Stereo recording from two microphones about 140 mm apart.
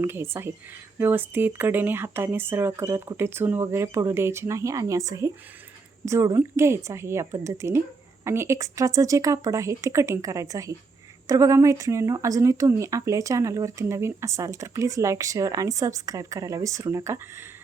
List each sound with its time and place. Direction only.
0.0 s speech: 15° right (ahead or behind)